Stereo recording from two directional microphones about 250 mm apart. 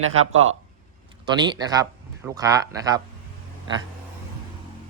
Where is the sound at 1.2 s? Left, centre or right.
Centre.